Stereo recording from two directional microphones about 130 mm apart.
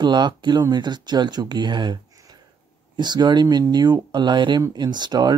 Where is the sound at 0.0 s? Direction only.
35° right (ahead or behind).